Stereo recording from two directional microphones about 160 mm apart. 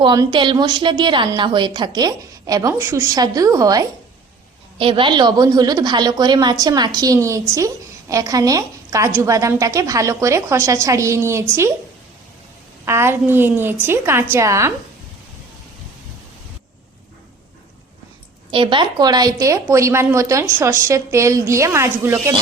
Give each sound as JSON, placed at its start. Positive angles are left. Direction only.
{"t": 0.0, "sound": "a woman's voice", "side_deg": -30}
{"t": 4.8, "sound": "a woman's voice", "side_deg": -35}
{"t": 12.8, "sound": "a woman's voice", "side_deg": -15}
{"t": 18.5, "sound": "a woman's voice", "side_deg": -30}